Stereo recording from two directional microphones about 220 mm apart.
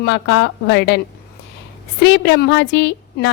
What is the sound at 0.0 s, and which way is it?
Speech, 55° left (ahead or behind).